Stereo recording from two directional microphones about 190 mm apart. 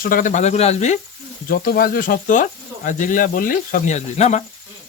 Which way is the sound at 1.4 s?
50° left (ahead or behind).